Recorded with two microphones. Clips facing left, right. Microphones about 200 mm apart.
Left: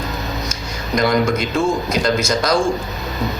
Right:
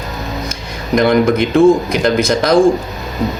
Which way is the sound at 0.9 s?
55° right (ahead or behind).